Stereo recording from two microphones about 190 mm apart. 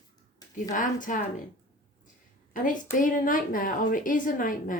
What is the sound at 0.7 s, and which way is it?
Speech, 45° left (ahead or behind).